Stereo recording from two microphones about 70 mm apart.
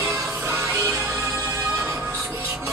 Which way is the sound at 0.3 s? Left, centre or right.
Right.